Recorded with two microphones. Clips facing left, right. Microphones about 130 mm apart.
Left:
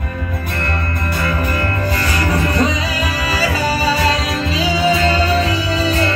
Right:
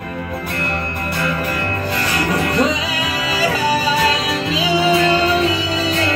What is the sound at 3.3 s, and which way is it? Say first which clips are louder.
Music: right 2 dB; 20° right (ahead or behind).